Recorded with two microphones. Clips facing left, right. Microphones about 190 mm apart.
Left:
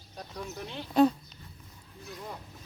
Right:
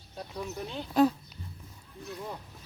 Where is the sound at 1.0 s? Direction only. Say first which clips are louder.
Left 1 dB; 5° right (ahead or behind).